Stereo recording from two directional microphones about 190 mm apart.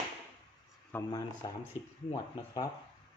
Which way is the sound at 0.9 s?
20° left (ahead or behind).